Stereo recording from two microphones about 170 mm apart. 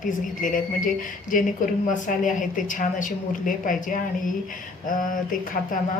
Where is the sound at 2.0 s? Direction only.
50° left (ahead or behind).